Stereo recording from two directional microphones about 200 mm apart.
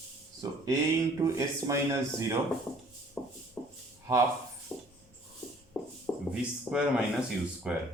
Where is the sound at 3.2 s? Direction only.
5° left (ahead or behind).